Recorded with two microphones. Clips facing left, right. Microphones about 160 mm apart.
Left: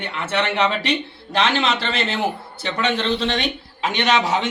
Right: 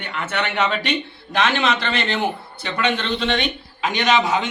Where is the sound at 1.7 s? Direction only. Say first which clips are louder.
Right 1 dB; 30° left (ahead or behind).